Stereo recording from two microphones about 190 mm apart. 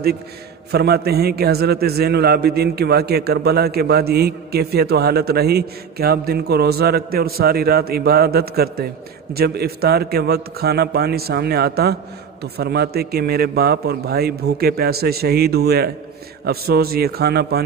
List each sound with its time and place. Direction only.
0.7 s a man's voice: 55° right (ahead or behind)